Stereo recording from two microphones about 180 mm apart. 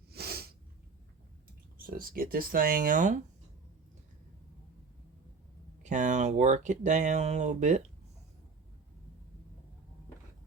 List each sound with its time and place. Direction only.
0.1 s sneeze: 60° right (ahead or behind)
1.9 s speech: 50° right (ahead or behind)
5.8 s speech: 40° right (ahead or behind)